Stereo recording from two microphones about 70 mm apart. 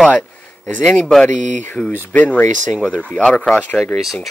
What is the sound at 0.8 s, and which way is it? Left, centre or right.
Speech, centre.